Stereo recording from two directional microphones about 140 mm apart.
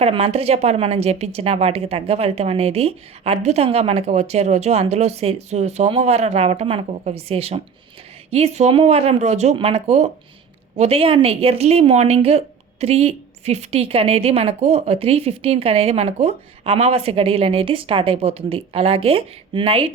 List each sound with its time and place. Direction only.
0.0 s a woman's voice: 45° right (ahead or behind)